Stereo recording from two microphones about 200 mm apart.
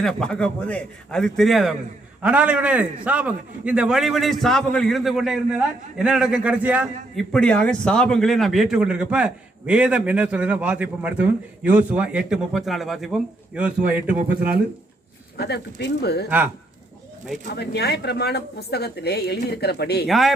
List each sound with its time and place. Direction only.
0.0 s speech: 5° left (ahead or behind)
7.3 s speech: 5° left (ahead or behind)
15.4 s a woman's voice: 55° left (ahead or behind)
17.5 s a woman's voice: 55° left (ahead or behind)
20.1 s speech: centre (ahead or behind)